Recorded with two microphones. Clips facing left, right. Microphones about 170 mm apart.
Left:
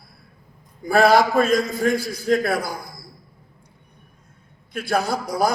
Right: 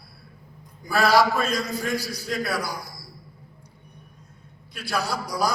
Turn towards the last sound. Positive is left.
turn(degrees=50)  # may be behind; listen again after turning